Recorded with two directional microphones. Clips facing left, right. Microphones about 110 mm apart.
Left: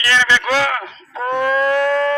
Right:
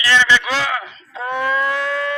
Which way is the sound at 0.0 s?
45° left (ahead or behind).